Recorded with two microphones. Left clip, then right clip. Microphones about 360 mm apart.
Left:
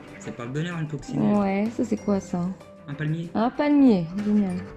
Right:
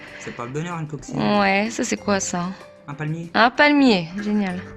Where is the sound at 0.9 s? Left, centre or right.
Right.